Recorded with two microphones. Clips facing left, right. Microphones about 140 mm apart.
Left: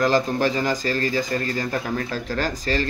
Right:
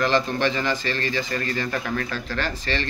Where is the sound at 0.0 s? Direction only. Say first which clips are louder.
Left 2 dB; 40° left (ahead or behind).